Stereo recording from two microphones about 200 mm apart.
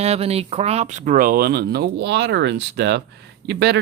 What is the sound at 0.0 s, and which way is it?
Speech, 30° right (ahead or behind).